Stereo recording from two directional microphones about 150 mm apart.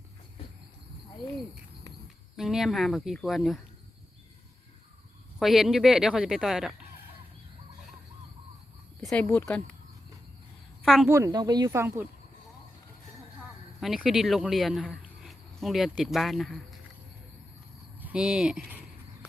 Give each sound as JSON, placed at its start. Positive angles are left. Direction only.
{"t": 2.3, "sound": "speech", "side_deg": 0}
{"t": 5.4, "sound": "speech", "side_deg": 0}
{"t": 9.0, "sound": "speech", "side_deg": 10}
{"t": 10.8, "sound": "speech", "side_deg": 0}
{"t": 11.1, "sound": "speech", "side_deg": -20}
{"t": 13.8, "sound": "speech", "side_deg": 0}
{"t": 18.0, "sound": "speech", "side_deg": -5}